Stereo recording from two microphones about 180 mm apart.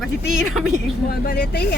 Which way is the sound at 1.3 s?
65° left (ahead or behind).